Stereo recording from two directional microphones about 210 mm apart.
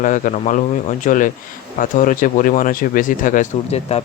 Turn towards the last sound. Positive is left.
turn(degrees=30)  # may be behind; listen again after turning